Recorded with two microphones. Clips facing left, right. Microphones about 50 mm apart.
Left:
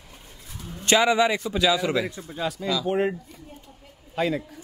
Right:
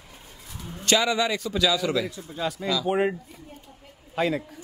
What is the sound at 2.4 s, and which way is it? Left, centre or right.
Speech, centre.